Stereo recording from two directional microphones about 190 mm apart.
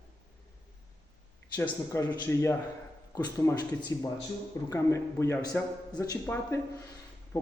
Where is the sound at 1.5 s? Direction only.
15° left (ahead or behind).